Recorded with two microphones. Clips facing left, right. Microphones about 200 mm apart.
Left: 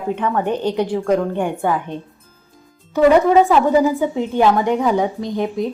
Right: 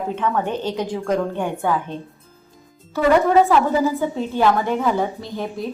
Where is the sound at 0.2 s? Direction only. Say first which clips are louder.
Left 2 dB; 15° left (ahead or behind).